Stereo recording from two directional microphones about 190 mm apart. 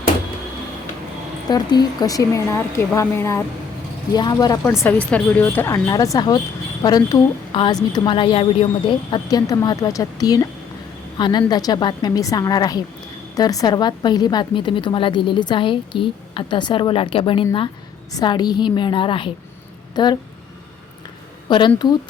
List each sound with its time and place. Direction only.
1.5 s a woman's voice: 20° left (ahead or behind)
21.8 s a woman's voice: 25° left (ahead or behind)